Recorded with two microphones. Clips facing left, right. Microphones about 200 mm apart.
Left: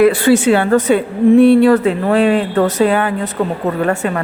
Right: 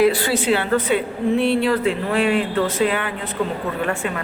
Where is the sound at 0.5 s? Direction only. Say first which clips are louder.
Left 7 dB; 45° left (ahead or behind).